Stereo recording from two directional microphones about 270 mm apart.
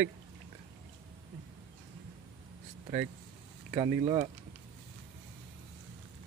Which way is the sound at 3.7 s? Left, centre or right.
Centre.